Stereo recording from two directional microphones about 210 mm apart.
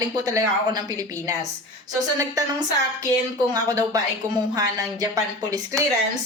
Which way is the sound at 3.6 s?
15° right (ahead or behind).